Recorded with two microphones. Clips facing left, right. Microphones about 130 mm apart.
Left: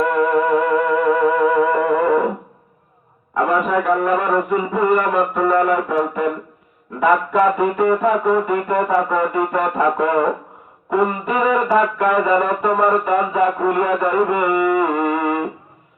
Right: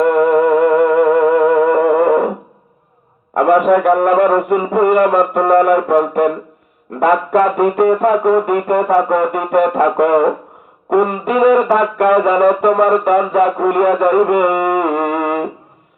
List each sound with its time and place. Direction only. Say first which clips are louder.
0.1 s music: right 5 dB; 60° right (ahead or behind)
3.3 s music: right 7 dB; 65° right (ahead or behind)
11.4 s music: right 5 dB; 60° right (ahead or behind)